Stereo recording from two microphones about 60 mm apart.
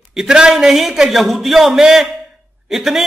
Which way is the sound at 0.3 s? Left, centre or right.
Centre.